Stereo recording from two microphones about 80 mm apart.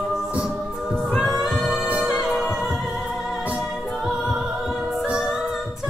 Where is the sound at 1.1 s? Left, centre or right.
Centre.